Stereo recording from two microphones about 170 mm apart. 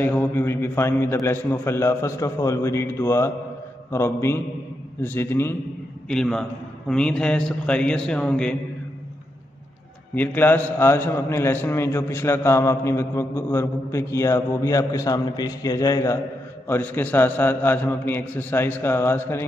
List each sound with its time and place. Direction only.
0.0 s a man's voice: 10° left (ahead or behind)
10.1 s a man's voice: 10° left (ahead or behind)